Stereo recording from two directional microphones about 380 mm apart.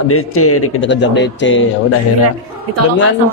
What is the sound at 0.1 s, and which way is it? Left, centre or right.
A man's voice, left.